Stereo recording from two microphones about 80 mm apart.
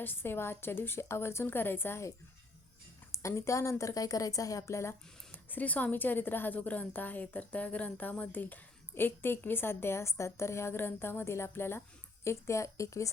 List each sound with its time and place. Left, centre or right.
0.0 s a woman's voice: left
5.3 s a woman's voice: left